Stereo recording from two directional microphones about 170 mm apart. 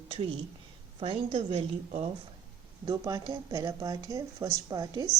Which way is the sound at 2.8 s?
20° right (ahead or behind).